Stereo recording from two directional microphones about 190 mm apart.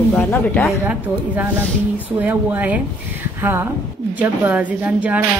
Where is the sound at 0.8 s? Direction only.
10° right (ahead or behind).